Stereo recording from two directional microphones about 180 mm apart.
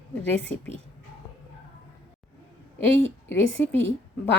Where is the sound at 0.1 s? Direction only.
10° left (ahead or behind).